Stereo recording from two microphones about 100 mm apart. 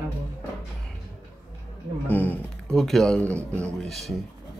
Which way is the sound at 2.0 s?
15° left (ahead or behind).